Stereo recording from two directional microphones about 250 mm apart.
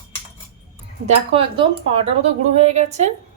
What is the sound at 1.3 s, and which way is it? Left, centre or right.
Speech, right.